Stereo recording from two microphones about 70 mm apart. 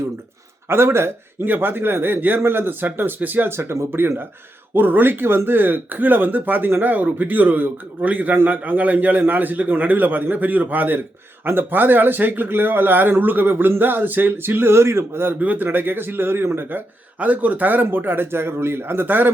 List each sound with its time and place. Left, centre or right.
0.7 s speech: right
15.4 s speech: right